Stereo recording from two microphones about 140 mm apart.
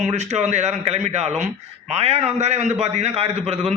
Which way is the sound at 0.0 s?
50° right (ahead or behind).